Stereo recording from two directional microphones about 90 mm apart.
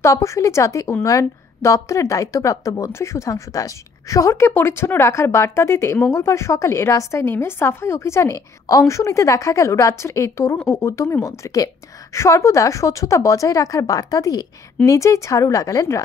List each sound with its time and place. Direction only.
0.0 s speech: 35° left (ahead or behind)